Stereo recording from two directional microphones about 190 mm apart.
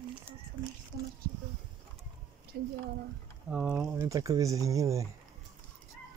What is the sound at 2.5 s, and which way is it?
Speech, 50° right (ahead or behind).